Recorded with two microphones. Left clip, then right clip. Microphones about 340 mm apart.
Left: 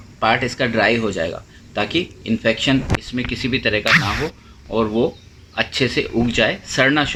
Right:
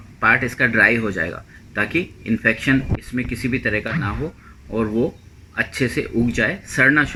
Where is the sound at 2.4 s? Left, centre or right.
Centre.